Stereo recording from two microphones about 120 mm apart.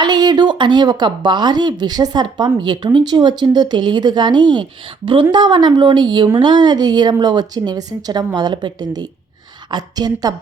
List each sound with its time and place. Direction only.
0.0 s a woman's voice: 35° right (ahead or behind)